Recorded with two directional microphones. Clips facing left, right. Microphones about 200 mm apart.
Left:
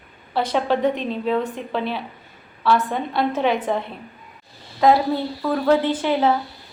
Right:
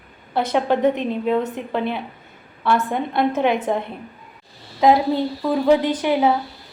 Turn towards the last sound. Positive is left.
turn(degrees=-15)  # may be behind; listen again after turning